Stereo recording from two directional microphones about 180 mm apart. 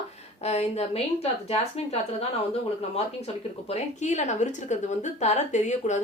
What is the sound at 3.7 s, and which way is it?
A woman's voice, 40° left (ahead or behind).